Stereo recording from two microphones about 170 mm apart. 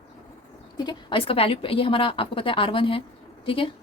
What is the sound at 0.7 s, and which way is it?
A woman's voice, 30° left (ahead or behind).